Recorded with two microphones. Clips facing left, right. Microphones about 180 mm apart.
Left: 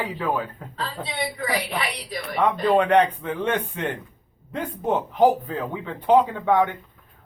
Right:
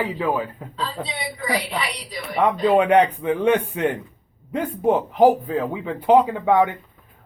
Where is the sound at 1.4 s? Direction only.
60° left (ahead or behind).